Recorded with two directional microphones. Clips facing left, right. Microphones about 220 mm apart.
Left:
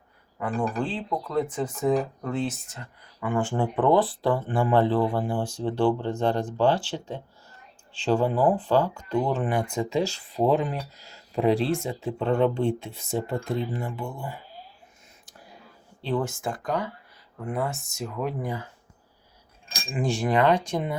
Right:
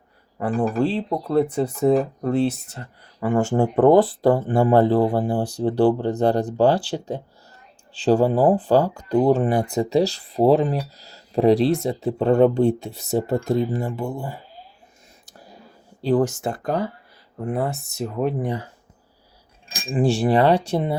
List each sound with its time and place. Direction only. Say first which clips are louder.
0.4 s speech: right 6 dB; 35° right (ahead or behind)
15.3 s whispering: right 4 dB; 40° right (ahead or behind)
16.0 s speech: right 8 dB; 45° right (ahead or behind)
19.9 s speech: right 6 dB; 35° right (ahead or behind)